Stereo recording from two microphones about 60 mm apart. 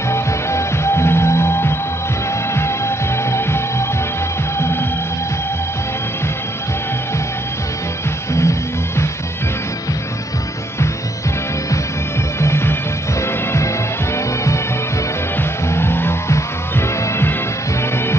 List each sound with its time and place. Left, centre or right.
0.1 s music: left
3.3 s music: left
8.3 s music: left
12.4 s music: left
14.1 s music: left
15.7 s music: left